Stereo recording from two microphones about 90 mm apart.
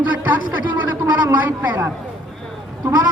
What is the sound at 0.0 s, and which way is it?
Speech, 15° right (ahead or behind).